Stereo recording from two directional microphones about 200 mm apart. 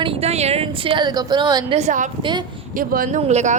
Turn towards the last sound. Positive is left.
turn(degrees=-35)  # may be behind; listen again after turning